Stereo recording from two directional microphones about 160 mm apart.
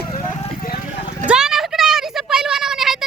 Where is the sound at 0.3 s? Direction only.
65° left (ahead or behind).